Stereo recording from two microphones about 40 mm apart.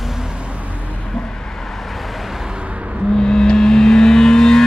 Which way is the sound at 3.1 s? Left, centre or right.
Centre.